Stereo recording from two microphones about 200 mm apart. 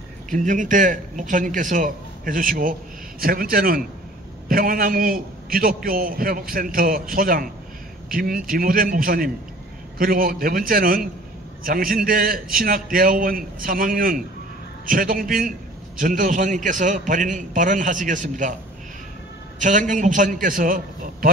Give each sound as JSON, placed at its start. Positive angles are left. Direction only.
{"t": 0.3, "sound": "a man's voice", "side_deg": -40}
{"t": 19.6, "sound": "a man's voice", "side_deg": -40}